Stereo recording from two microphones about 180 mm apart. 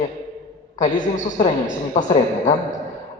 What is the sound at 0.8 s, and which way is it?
A man's voice, 45° left (ahead or behind).